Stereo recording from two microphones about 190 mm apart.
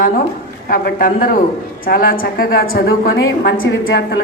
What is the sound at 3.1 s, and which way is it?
Speech, 85° left.